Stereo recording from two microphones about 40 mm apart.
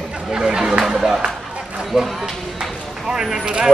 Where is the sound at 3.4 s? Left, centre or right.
Right.